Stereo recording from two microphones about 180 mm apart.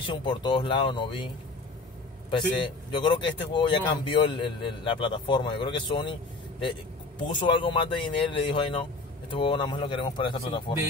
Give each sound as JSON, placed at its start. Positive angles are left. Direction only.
{"t": 0.0, "sound": "a man's voice", "side_deg": 25}
{"t": 2.3, "sound": "a man's voice", "side_deg": 25}
{"t": 7.2, "sound": "a man's voice", "side_deg": 25}